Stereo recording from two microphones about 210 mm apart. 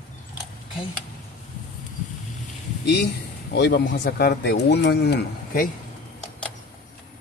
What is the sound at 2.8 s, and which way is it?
Speech, 50° left (ahead or behind).